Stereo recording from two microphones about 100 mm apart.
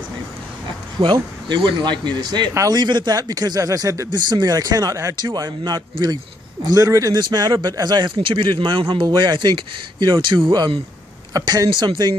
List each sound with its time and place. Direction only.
0.9 s speech: 50° right (ahead or behind)
8.2 s speech: 55° right (ahead or behind)
9.0 s speech: 45° right (ahead or behind)